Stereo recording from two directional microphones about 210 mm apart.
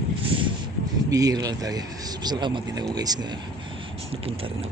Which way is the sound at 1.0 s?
15° right (ahead or behind).